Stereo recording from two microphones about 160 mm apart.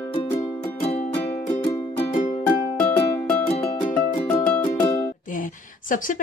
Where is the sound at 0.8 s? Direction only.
40° left (ahead or behind).